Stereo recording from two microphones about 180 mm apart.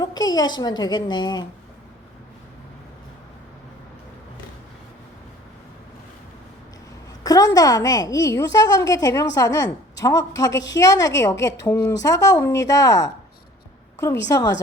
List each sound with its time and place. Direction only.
0.0 s speech: 20° left (ahead or behind)
7.3 s a woman's voice: 20° left (ahead or behind)
14.3 s speech: 20° left (ahead or behind)